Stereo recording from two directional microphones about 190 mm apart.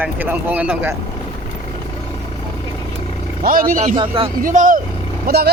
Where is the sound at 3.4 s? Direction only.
45° right (ahead or behind).